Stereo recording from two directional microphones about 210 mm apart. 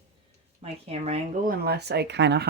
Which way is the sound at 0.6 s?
30° right (ahead or behind).